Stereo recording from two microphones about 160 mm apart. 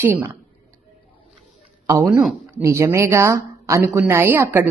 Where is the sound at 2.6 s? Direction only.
15° right (ahead or behind).